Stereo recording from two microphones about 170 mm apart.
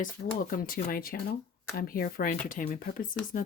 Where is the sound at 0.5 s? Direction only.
60° left (ahead or behind).